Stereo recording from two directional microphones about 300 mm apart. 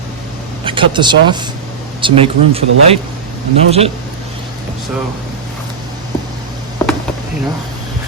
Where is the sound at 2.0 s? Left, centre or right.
Centre.